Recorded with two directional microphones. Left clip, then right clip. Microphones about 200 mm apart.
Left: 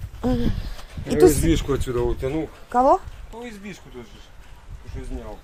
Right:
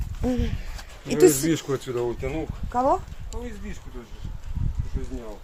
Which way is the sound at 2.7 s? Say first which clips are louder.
Left 5 dB; 35° left (ahead or behind).